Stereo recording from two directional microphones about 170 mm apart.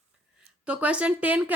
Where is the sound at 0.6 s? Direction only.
5° right (ahead or behind).